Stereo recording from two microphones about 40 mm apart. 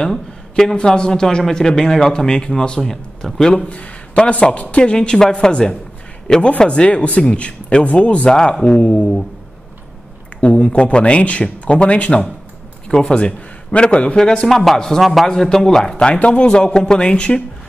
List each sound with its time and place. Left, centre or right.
0.0 s speech: centre
0.7 s a man's voice: left
2.8 s a man's voice: centre
3.6 s a woman's voice: left
6.9 s speech: left
8.3 s a woman's voice: left
10.4 s a woman's voice: left
12.8 s a sound: centre
13.1 s a man's voice: left
14.5 s a man's voice: centre
15.3 s a man's voice: centre
16.1 s a woman's voice: left